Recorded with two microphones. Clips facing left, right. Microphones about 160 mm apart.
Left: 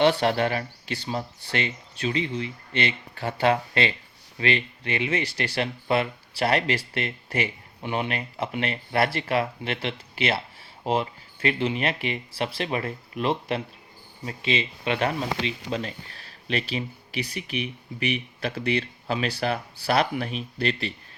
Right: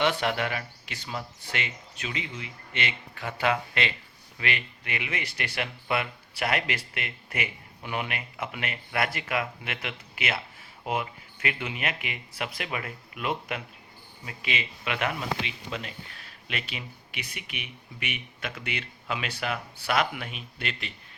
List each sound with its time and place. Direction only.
0.0 s speech: 30° left (ahead or behind)